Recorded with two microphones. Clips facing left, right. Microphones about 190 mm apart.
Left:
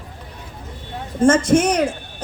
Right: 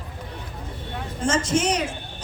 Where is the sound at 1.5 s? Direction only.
55° left (ahead or behind).